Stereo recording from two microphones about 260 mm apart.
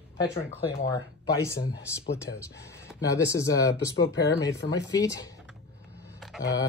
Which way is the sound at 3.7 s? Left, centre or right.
Left.